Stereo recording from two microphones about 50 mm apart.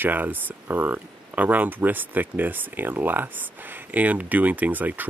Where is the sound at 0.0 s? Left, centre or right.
Right.